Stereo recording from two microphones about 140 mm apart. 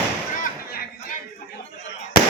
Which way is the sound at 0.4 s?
90° left.